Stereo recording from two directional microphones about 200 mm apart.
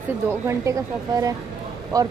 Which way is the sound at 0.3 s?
15° right (ahead or behind).